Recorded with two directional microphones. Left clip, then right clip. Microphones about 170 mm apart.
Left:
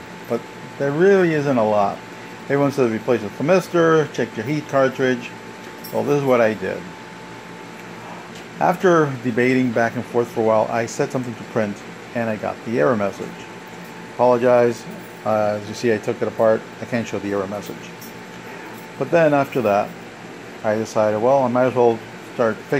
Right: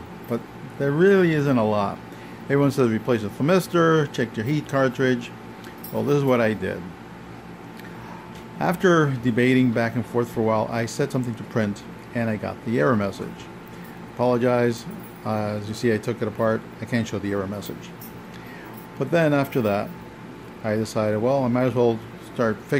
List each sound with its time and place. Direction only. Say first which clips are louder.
0.8 s speech: left 3 dB; 15° right (ahead or behind)
8.5 s speech: left 4 dB; 15° right (ahead or behind)
14.1 s speech: left 6 dB; 15° right (ahead or behind)
18.9 s speech: left 5 dB; 15° right (ahead or behind)
20.9 s speech: left 6 dB; 15° right (ahead or behind)